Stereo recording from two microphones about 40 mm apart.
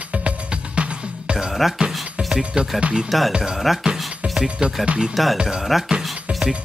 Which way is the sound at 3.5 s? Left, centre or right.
Centre.